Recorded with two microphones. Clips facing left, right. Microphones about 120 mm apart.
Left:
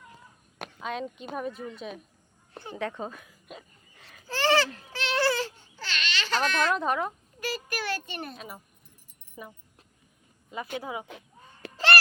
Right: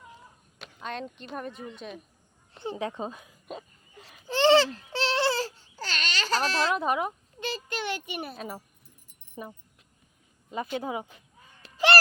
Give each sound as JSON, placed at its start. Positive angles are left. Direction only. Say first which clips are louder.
{"t": 0.8, "sound": "speech", "louder": "left 2 dB", "side_deg": 5}
{"t": 2.6, "sound": "speech", "louder": "right 2 dB", "side_deg": -20}
{"t": 4.0, "sound": "a sound", "louder": "right 5 dB", "side_deg": -20}
{"t": 4.9, "sound": "baby cry", "louder": "even", "side_deg": -30}
{"t": 6.7, "sound": "speech", "louder": "even", "side_deg": -5}
{"t": 7.3, "sound": "a sound", "louder": "left 2 dB", "side_deg": -25}
{"t": 9.4, "sound": "speech", "louder": "right 3 dB", "side_deg": -30}
{"t": 10.8, "sound": "speech", "louder": "right 3 dB", "side_deg": -30}